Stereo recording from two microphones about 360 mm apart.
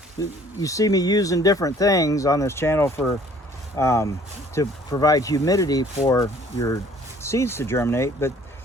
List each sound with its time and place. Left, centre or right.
0.2 s speech: centre